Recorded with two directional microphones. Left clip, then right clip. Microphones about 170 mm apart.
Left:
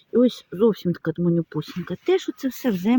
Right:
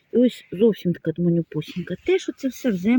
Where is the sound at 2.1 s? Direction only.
10° left (ahead or behind).